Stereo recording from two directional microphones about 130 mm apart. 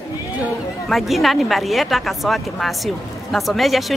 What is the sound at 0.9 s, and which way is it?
A woman's voice, centre (ahead or behind).